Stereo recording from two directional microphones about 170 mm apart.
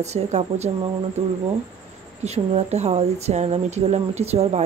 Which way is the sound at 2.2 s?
40° right (ahead or behind).